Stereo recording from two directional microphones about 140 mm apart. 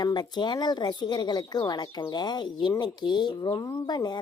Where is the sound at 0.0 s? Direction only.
30° left (ahead or behind).